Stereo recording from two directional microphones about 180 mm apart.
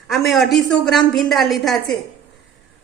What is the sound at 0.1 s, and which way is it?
A woman's voice, centre (ahead or behind).